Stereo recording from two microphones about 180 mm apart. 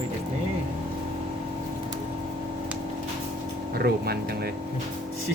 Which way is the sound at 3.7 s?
60° right (ahead or behind).